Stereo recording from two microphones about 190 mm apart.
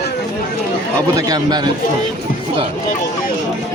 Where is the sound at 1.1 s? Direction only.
20° right (ahead or behind).